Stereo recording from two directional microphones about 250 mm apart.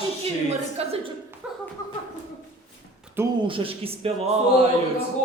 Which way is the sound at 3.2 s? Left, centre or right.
Right.